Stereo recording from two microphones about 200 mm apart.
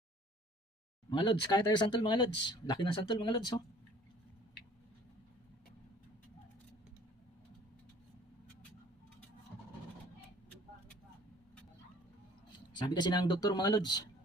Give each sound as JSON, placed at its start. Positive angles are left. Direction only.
{"t": 1.1, "sound": "speech", "side_deg": 25}
{"t": 12.5, "sound": "speech", "side_deg": 20}